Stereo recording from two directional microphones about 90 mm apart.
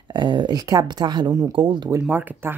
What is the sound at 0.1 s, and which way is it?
Speech, 60° right (ahead or behind).